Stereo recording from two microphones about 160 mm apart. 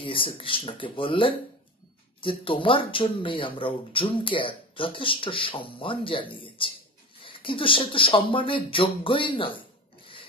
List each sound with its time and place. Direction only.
0.0 s speech: 35° left (ahead or behind)